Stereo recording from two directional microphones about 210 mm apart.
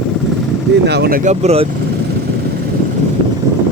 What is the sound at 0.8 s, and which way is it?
Speech, 50° right (ahead or behind).